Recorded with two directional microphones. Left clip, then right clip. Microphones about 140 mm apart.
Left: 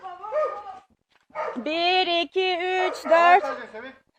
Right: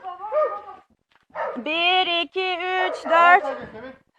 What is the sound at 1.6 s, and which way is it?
Speech, 35° left (ahead or behind).